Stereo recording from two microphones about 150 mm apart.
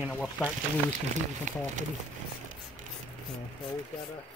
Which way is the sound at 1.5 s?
55° right (ahead or behind).